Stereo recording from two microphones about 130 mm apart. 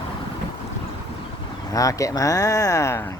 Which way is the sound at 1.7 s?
25° left (ahead or behind).